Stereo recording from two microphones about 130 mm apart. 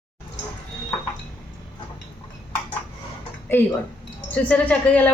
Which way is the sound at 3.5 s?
15° left (ahead or behind).